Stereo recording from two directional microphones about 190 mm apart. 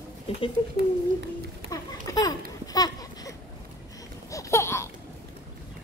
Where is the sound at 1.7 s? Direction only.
20° left (ahead or behind).